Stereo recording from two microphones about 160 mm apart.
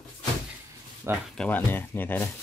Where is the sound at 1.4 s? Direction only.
10° left (ahead or behind).